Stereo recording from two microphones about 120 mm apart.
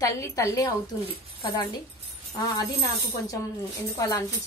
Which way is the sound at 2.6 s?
30° left (ahead or behind).